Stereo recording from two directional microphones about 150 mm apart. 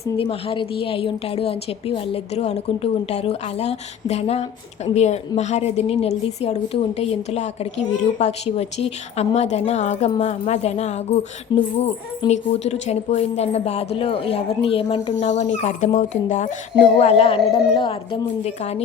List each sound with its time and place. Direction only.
0.2 s a woman's voice: 40° left (ahead or behind)
11.5 s speech: 30° left (ahead or behind)
12.3 s a woman's voice: 50° left (ahead or behind)
15.1 s a woman's voice: 50° left (ahead or behind)
18.4 s a woman's voice: 45° left (ahead or behind)